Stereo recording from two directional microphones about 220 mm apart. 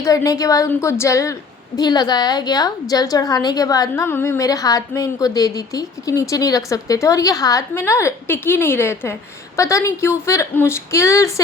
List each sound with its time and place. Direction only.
0.0 s a woman's voice: 15° left (ahead or behind)